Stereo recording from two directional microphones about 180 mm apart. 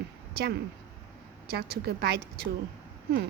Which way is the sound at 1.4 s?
60° right (ahead or behind).